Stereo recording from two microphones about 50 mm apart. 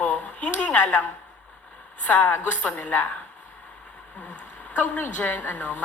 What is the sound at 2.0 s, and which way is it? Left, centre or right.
Speech, left.